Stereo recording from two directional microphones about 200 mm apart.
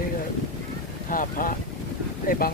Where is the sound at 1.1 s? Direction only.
45° left (ahead or behind).